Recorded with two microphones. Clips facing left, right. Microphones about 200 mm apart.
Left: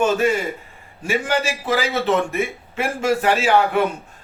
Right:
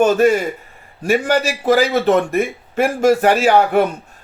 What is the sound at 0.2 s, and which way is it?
Speech, 40° right (ahead or behind).